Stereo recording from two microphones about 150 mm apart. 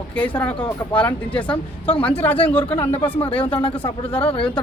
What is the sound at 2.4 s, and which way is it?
Speech, 10° left (ahead or behind).